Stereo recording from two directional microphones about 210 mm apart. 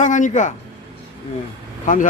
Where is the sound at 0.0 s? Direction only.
35° left (ahead or behind).